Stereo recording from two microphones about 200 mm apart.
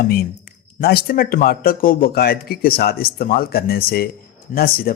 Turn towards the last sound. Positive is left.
turn(degrees=50)  # may be behind; listen again after turning